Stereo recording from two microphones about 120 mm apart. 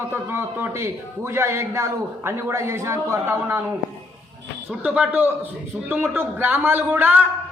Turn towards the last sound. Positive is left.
turn(degrees=-15)  # may be behind; listen again after turning